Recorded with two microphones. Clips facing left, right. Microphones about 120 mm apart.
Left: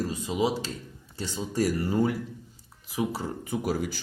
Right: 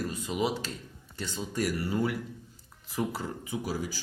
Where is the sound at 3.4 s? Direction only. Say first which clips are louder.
Left 6 dB; 50° left (ahead or behind).